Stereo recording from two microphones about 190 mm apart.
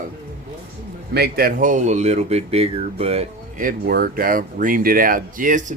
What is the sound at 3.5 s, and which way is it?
Speech, 50° right (ahead or behind).